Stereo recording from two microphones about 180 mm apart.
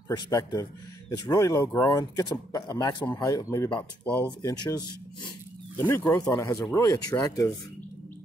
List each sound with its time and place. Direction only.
0.1 s speech: 20° left (ahead or behind)